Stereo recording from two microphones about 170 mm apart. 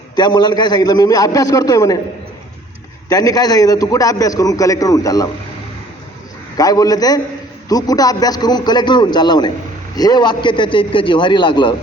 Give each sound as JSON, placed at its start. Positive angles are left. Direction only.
{"t": 0.2, "sound": "a man's voice", "side_deg": 25}
{"t": 3.1, "sound": "a man's voice", "side_deg": 20}
{"t": 6.6, "sound": "a man's voice", "side_deg": 20}